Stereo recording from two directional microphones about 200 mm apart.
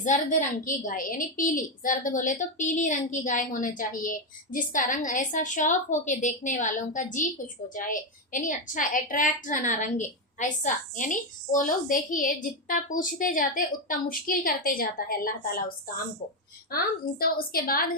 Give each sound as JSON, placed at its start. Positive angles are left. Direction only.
{"t": 0.0, "sound": "a woman's voice", "side_deg": 40}
{"t": 16.7, "sound": "a woman's voice", "side_deg": 50}